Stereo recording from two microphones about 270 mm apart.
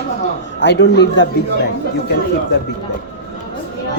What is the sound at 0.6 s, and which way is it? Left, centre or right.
Speech, left.